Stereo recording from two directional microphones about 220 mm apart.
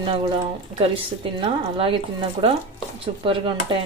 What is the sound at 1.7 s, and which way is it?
Speech, 25° right (ahead or behind).